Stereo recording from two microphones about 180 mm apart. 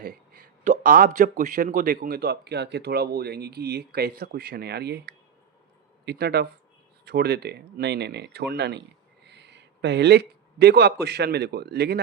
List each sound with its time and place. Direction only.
0.0 s speech: 50° right (ahead or behind)